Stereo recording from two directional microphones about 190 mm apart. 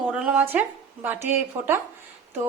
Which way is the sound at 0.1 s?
5° right (ahead or behind).